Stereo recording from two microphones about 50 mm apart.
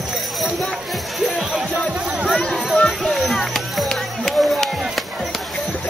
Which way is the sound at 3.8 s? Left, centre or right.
Centre.